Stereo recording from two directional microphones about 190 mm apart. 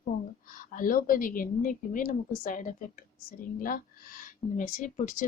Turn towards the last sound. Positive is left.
turn(degrees=45)  # may be behind; listen again after turning